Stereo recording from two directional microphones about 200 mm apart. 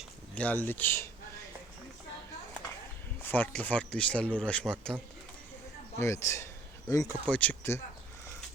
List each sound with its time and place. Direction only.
0.3 s speech: 10° left (ahead or behind)
3.2 s speech: 10° left (ahead or behind)
6.0 s speech: 15° left (ahead or behind)